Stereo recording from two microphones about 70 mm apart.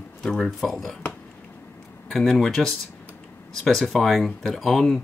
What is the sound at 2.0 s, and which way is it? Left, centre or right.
Speech, centre.